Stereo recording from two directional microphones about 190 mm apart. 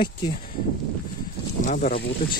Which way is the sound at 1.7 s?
40° left (ahead or behind).